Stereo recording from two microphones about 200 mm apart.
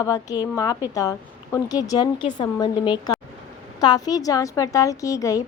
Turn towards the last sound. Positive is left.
turn(degrees=15)  # may be behind; listen again after turning